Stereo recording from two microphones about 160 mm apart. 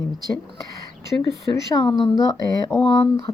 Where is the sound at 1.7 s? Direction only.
30° left (ahead or behind).